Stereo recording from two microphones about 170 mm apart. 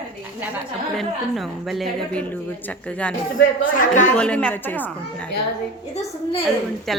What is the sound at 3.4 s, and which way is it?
Speech, 50° left (ahead or behind).